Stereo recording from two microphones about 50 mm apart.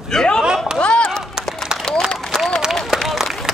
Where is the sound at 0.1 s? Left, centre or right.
Centre.